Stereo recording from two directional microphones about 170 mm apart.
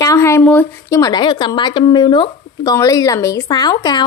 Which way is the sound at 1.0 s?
25° left (ahead or behind).